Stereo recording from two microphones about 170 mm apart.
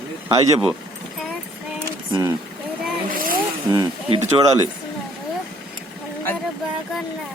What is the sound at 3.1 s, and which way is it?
Vehicle, 55° right (ahead or behind).